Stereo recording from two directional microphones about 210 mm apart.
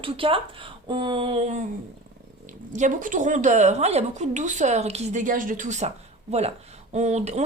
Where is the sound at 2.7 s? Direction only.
35° right (ahead or behind).